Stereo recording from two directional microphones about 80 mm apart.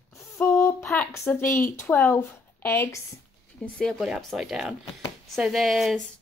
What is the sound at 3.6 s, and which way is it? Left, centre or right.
Speech, centre.